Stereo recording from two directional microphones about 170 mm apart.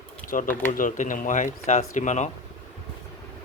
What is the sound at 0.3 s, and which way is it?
Speech, 50° left (ahead or behind).